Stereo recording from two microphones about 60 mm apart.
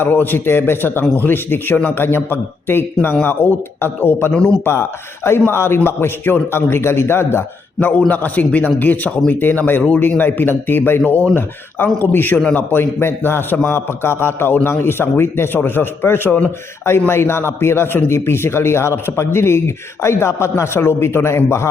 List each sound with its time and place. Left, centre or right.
0.0 s a man's voice: left; by 9.3 s centre
9.3 s a man's voice: left